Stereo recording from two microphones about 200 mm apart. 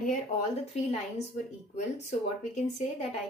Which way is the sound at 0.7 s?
35° left (ahead or behind).